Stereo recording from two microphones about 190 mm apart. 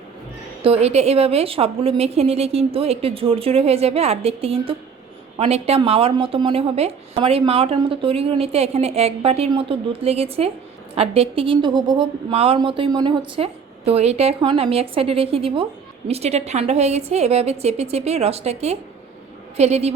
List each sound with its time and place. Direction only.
0.6 s a woman's voice: 30° right (ahead or behind)